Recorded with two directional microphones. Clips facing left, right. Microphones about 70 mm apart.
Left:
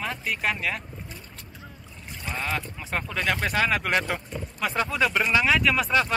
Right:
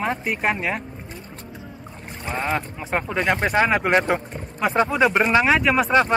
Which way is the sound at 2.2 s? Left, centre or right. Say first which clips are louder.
Right 5 dB; right.